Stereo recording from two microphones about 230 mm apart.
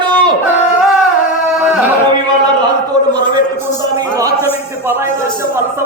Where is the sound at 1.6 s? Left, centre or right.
Centre.